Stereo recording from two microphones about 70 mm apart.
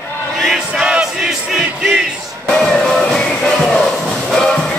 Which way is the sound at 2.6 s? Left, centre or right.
Centre.